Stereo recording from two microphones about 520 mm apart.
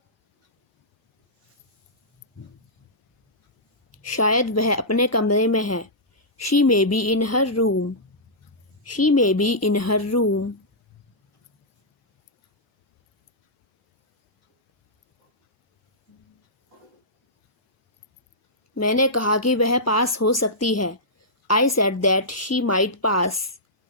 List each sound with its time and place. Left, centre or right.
3.9 s speech: left
18.7 s speech: left